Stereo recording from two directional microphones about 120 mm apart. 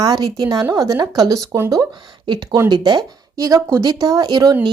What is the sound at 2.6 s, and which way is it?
Speech, 40° right (ahead or behind).